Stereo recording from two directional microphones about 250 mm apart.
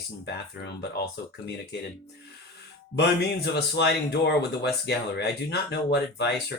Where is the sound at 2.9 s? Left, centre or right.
Left.